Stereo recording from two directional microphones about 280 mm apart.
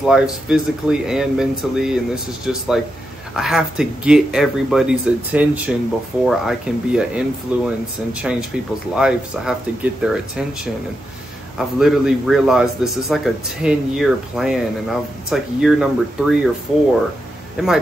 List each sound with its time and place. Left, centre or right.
0.0 s a man's voice: centre